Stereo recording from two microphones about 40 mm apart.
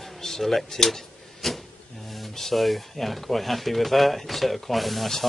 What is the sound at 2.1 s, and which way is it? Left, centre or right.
Speech, centre.